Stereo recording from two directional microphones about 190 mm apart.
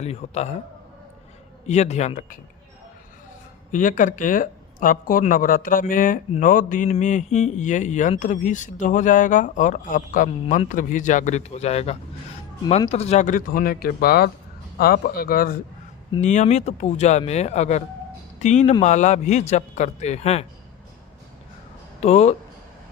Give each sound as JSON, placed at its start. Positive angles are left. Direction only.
{"t": 0.0, "sound": "speech", "side_deg": 35}
{"t": 1.6, "sound": "speech", "side_deg": 35}
{"t": 3.7, "sound": "speech", "side_deg": 45}
{"t": 16.2, "sound": "speech", "side_deg": 40}
{"t": 22.0, "sound": "speech", "side_deg": 35}